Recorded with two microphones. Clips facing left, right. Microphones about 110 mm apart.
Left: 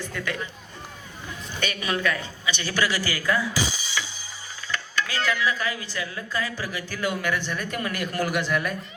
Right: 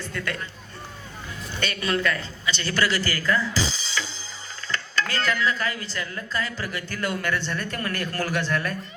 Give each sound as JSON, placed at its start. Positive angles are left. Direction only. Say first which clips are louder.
{"t": 0.0, "sound": "speech", "louder": "left 1 dB", "side_deg": 15}
{"t": 1.6, "sound": "a man's voice", "louder": "right 1 dB", "side_deg": 15}